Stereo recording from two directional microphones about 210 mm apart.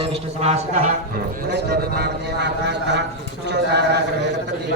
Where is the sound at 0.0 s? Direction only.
30° right (ahead or behind).